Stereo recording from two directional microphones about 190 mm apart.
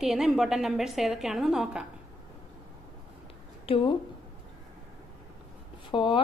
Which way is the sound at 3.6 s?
30° left (ahead or behind).